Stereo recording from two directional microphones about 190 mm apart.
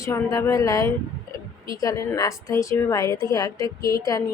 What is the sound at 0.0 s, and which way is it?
A woman's voice, 15° left (ahead or behind).